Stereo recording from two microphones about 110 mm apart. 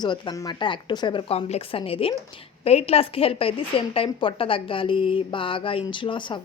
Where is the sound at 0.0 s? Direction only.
40° left (ahead or behind).